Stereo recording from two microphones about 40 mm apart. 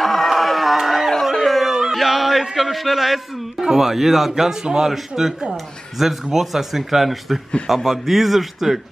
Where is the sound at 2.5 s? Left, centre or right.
Centre.